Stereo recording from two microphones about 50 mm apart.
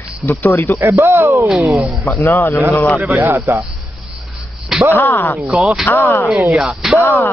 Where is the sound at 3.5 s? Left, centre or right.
Right.